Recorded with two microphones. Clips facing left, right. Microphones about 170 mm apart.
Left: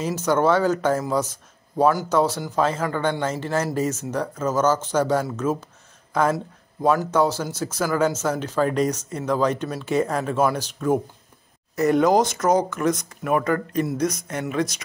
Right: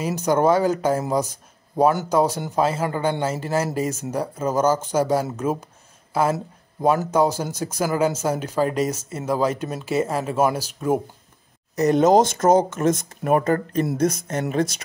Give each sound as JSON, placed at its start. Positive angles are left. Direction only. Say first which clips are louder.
{"t": 0.0, "sound": "a man's voice", "louder": "right 1 dB", "side_deg": -15}
{"t": 11.7, "sound": "speech", "louder": "right 2 dB", "side_deg": -20}
{"t": 13.1, "sound": "speech", "louder": "right 2 dB", "side_deg": -40}